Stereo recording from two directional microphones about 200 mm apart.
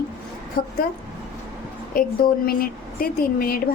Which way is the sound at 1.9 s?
45° left (ahead or behind).